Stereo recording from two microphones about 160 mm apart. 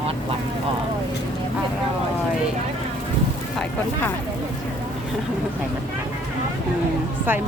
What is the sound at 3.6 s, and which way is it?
Speech, 10° left (ahead or behind).